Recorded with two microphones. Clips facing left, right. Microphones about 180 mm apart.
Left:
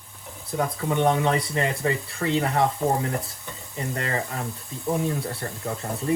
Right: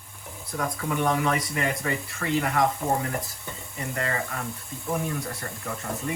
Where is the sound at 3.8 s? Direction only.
35° left (ahead or behind).